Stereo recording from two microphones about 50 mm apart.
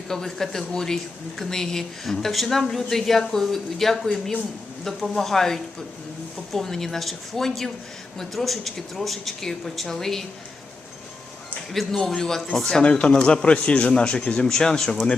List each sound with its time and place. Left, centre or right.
0.1 s a woman's voice: centre
11.9 s a woman's voice: centre